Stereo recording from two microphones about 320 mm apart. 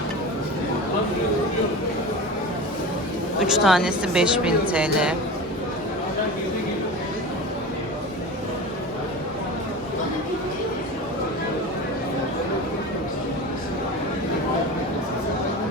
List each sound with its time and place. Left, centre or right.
3.4 s a woman's voice: centre